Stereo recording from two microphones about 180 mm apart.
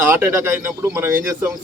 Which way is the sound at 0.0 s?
10° right (ahead or behind).